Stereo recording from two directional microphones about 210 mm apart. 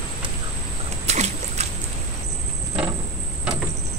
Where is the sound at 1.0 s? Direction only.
30° right (ahead or behind).